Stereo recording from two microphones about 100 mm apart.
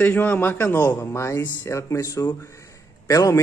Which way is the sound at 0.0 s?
20° left (ahead or behind).